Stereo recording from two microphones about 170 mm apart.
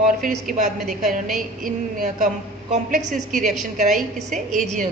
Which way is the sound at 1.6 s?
50° right (ahead or behind).